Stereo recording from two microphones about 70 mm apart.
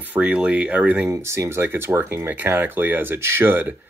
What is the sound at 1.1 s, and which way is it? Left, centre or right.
Speech, right.